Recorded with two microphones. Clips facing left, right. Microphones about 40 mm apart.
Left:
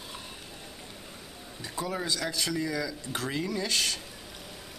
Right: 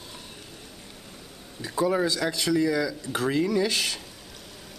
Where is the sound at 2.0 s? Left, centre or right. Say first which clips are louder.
Right 5 dB; centre.